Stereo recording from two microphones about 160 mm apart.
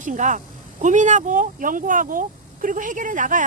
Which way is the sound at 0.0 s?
50° right (ahead or behind).